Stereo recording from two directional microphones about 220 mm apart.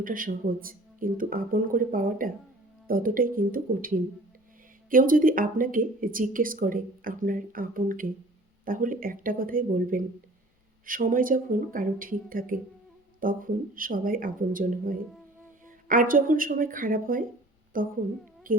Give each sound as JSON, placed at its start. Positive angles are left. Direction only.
{"t": 0.0, "sound": "speech", "side_deg": -40}
{"t": 18.5, "sound": "music", "side_deg": -40}